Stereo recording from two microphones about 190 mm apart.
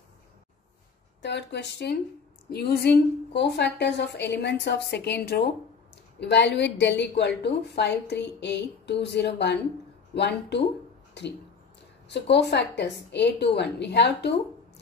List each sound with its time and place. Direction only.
1.2 s speech: 65° left (ahead or behind)